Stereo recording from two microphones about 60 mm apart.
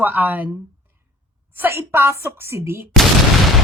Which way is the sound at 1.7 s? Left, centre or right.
Right.